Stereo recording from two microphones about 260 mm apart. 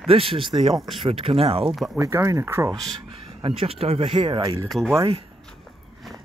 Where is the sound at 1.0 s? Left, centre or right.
Right.